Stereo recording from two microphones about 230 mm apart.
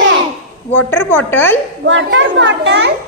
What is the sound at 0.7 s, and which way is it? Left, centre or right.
Speech, centre.